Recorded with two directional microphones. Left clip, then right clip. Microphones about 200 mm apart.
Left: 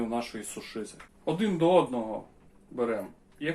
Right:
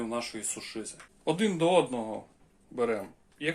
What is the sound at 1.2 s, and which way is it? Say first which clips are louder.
Speech: even; 45° right (ahead or behind).